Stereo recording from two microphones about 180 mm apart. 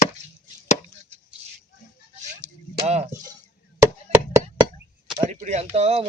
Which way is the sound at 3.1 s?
15° right (ahead or behind).